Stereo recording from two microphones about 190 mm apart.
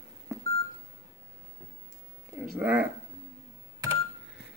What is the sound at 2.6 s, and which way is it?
Speech, 10° right (ahead or behind).